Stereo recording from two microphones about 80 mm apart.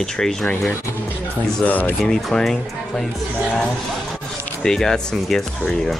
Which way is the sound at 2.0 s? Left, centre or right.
Centre.